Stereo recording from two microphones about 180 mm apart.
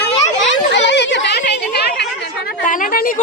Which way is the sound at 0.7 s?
75° left (ahead or behind).